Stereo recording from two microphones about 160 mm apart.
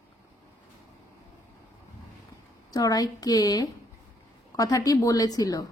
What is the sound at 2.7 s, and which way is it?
A woman's voice, 25° left (ahead or behind).